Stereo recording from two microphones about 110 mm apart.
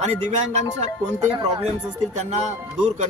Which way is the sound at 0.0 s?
90° right.